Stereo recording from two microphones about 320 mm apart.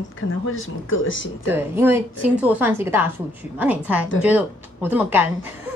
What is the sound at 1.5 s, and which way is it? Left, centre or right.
A woman's voice, centre.